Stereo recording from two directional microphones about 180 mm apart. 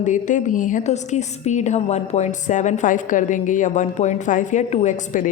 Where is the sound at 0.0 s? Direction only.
45° left (ahead or behind).